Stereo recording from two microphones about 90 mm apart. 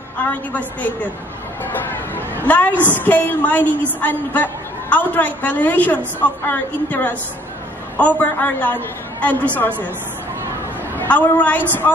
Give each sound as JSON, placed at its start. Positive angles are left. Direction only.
{"t": 0.2, "sound": "a woman's voice", "side_deg": 15}
{"t": 11.0, "sound": "a woman's voice", "side_deg": 20}